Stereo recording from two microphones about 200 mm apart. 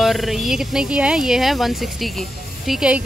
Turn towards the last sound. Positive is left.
turn(degrees=-5)  # may be behind; listen again after turning